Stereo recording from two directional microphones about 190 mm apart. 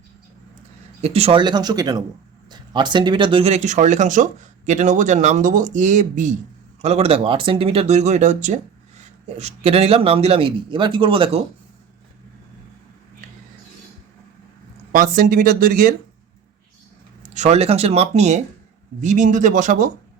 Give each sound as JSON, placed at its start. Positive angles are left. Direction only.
{"t": 1.0, "sound": "speech", "side_deg": -30}
{"t": 14.9, "sound": "speech", "side_deg": -45}
{"t": 17.2, "sound": "speech", "side_deg": -35}